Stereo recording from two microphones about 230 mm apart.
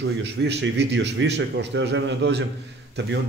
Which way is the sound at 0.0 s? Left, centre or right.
Right.